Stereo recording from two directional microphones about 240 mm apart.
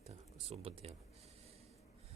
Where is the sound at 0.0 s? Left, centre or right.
Right.